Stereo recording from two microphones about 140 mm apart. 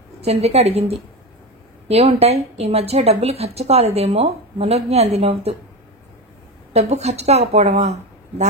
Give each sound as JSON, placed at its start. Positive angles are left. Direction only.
{"t": 0.2, "sound": "a woman's voice", "side_deg": -50}
{"t": 6.7, "sound": "a woman's voice", "side_deg": -50}